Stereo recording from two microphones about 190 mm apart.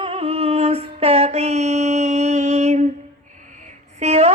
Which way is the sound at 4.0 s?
35° right (ahead or behind).